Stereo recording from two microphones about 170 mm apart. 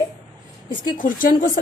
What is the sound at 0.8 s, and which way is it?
Speech, 55° left (ahead or behind).